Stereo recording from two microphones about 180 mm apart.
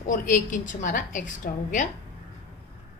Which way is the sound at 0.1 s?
45° left (ahead or behind).